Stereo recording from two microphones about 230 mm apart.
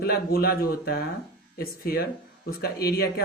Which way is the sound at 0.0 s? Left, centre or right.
Left.